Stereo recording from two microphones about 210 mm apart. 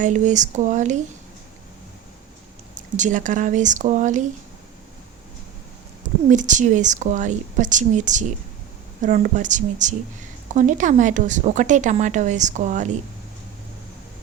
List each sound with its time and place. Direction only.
0.0 s a woman's voice: 35° right (ahead or behind)
2.7 s a woman's voice: 35° right (ahead or behind)
6.3 s a woman's voice: 35° right (ahead or behind)